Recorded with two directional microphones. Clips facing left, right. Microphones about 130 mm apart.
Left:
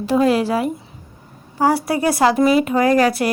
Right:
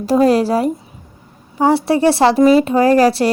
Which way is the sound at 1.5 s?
25° right (ahead or behind).